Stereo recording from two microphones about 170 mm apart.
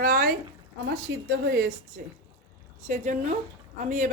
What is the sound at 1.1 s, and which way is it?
Speech, 90° right.